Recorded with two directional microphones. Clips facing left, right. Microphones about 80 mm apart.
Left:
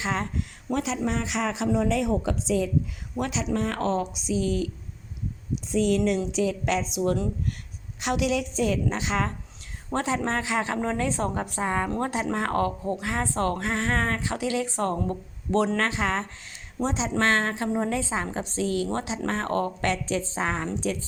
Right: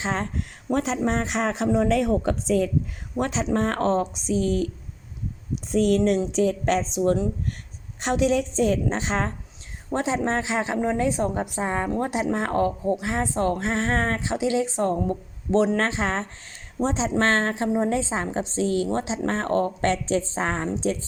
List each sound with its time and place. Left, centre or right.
0.0 s speech: right
3.2 s a woman's voice: right
5.7 s a woman's voice: right
9.9 s a woman's voice: right